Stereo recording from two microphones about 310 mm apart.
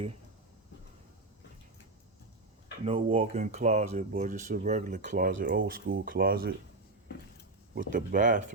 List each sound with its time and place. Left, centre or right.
2.8 s speech: centre
7.8 s speech: right